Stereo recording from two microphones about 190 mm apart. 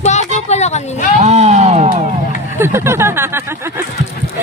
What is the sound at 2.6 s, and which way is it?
Speech, 15° right (ahead or behind).